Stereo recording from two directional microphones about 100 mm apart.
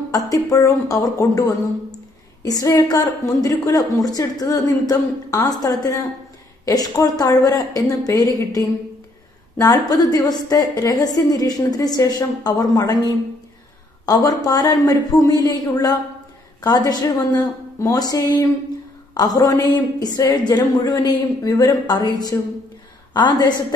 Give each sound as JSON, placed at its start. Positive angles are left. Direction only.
{"t": 0.1, "sound": "a woman's voice", "side_deg": 35}
{"t": 9.6, "sound": "a woman's voice", "side_deg": 35}
{"t": 23.1, "sound": "a woman's voice", "side_deg": 50}